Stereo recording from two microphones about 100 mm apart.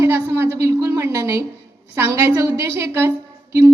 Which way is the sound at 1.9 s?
25° right (ahead or behind).